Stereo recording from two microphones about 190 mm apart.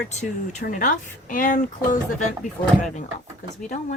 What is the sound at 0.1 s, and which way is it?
Speech, 40° left (ahead or behind).